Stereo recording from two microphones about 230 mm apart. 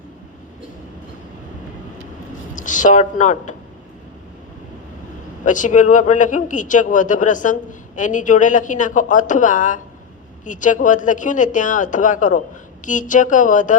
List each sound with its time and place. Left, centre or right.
2.6 s a woman's voice: left
5.5 s a man's voice: left